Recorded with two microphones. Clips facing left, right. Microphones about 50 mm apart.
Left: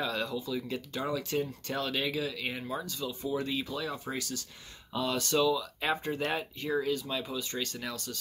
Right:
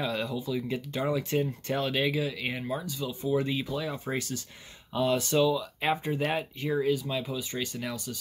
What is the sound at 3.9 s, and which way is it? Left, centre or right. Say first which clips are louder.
Speech: right 4 dB; right.